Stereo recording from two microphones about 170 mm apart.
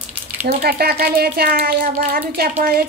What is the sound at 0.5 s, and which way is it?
Speech, 65° right (ahead or behind).